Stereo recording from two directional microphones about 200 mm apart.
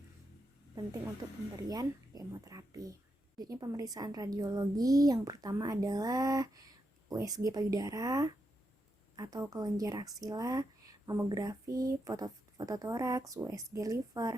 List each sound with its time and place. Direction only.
1.5 s speech: 20° right (ahead or behind)